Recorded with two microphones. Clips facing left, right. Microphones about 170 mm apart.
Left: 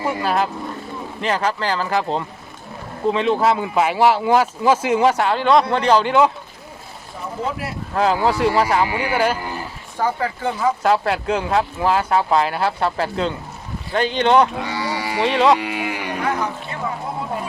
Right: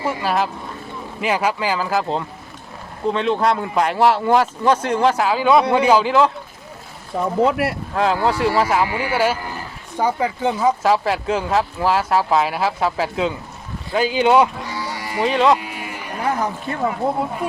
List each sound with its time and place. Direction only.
0.0 s speech: centre (ahead or behind)
7.4 s speech: 65° right (ahead or behind)
7.9 s speech: centre (ahead or behind)
10.0 s speech: 20° right (ahead or behind)
10.8 s speech: centre (ahead or behind)
14.6 s cattle: 70° left (ahead or behind)
15.2 s speech: centre (ahead or behind)
15.5 s speech: 80° left